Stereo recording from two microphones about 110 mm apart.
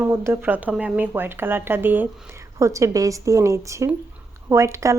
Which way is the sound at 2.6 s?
30° right (ahead or behind).